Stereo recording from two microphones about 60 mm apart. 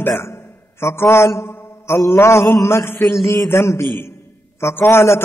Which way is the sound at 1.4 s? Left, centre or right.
Left.